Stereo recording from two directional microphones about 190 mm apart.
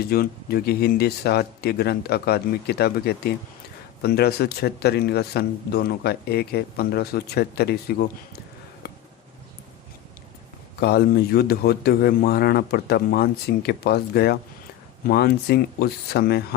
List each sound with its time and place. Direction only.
0.0 s speech: 55° left (ahead or behind)
8.8 s a sound: 55° left (ahead or behind)
10.8 s speech: 55° left (ahead or behind)